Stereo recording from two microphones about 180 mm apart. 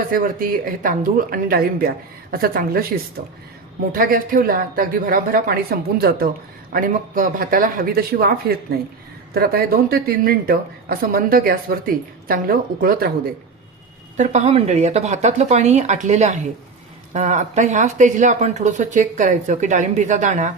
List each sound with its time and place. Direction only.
0.1 s speech: 50° right (ahead or behind)
14.2 s speech: 40° right (ahead or behind)